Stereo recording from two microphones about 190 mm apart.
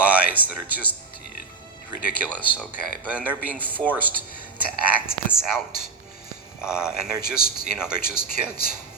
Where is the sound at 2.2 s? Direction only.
10° right (ahead or behind).